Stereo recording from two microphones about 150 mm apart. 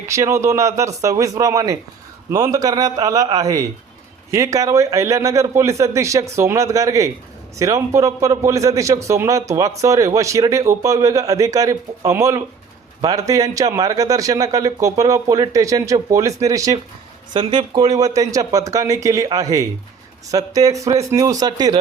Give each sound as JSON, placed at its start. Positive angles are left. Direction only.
{"t": 0.1, "sound": "a man's voice", "side_deg": -20}